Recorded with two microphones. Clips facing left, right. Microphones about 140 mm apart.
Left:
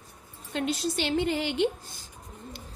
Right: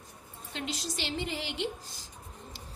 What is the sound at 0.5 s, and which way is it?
A woman's voice, 55° left (ahead or behind).